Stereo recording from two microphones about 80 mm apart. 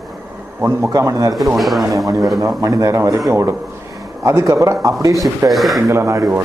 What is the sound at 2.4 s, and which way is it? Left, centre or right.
A man's voice, right.